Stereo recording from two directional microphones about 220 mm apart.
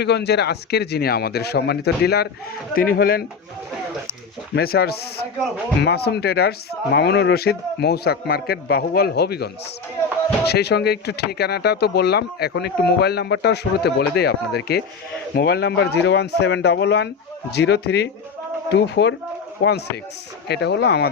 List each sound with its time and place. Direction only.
0.0 s speech: 50° left (ahead or behind)
4.5 s speech: 45° left (ahead or behind)
20.5 s speech: 50° left (ahead or behind)